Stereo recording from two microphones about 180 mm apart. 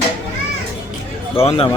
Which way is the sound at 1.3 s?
30° left (ahead or behind).